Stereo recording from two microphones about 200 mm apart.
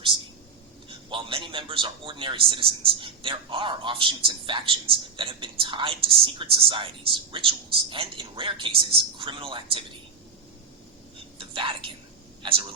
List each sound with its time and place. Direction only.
0.9 s a man's voice: 25° right (ahead or behind)
11.3 s speech: 25° right (ahead or behind)